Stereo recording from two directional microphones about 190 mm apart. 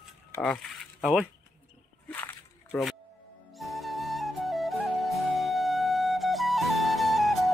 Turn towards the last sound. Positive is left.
turn(degrees=0)  # may be behind; listen again after turning